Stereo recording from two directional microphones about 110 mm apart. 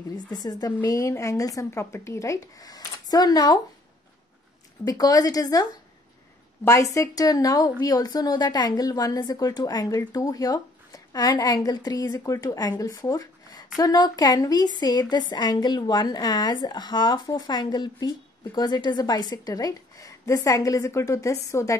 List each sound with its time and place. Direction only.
0.1 s a woman's voice: 35° left (ahead or behind)
4.8 s a woman's voice: 35° left (ahead or behind)